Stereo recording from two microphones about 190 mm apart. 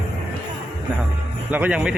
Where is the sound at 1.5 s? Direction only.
5° right (ahead or behind).